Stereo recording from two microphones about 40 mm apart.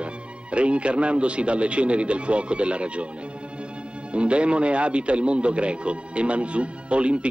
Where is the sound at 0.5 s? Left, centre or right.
Right.